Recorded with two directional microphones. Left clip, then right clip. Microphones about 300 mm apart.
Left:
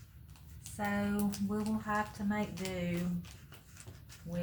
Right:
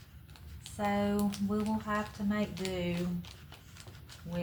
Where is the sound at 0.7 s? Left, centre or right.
Centre.